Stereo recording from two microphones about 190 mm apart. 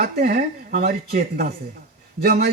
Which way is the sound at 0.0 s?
50° right (ahead or behind).